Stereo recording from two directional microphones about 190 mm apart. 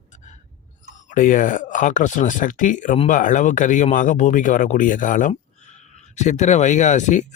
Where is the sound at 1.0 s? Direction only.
45° left (ahead or behind).